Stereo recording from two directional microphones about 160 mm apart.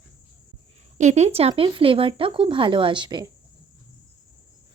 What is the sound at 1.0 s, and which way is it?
Speech, 45° right (ahead or behind).